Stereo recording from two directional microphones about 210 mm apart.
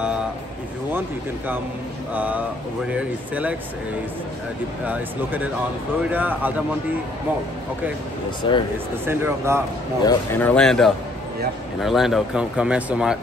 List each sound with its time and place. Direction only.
2.1 s speech: 5° right (ahead or behind)
4.8 s speech: 5° right (ahead or behind)
8.4 s speech: 25° left (ahead or behind)
9.0 s speech: 10° right (ahead or behind)
10.0 s speech: 10° left (ahead or behind)